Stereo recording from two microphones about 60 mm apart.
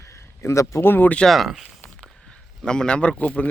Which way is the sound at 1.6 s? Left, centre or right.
Centre.